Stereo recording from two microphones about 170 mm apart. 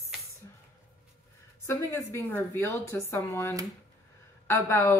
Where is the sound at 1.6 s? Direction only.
15° left (ahead or behind).